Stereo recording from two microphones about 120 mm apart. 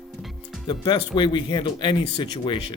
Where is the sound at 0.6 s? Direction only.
40° left (ahead or behind).